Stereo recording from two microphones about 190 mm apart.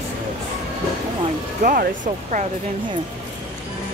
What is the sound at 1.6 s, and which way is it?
Speech, 45° right (ahead or behind).